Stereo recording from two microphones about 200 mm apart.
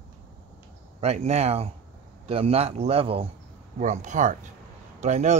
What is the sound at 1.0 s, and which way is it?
Speech, 30° right (ahead or behind).